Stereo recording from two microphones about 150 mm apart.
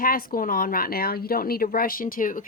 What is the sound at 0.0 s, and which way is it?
Speech, 75° left (ahead or behind).